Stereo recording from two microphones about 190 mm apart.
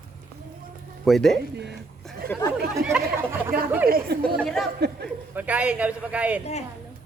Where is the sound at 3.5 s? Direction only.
50° right (ahead or behind).